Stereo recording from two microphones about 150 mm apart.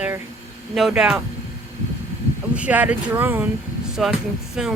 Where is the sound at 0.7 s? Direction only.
5° right (ahead or behind).